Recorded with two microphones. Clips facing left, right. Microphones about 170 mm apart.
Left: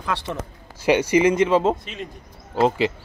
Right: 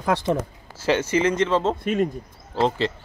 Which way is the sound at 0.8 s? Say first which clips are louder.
Left 4 dB; 15° left (ahead or behind).